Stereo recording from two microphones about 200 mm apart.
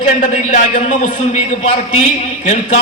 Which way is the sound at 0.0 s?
35° left (ahead or behind).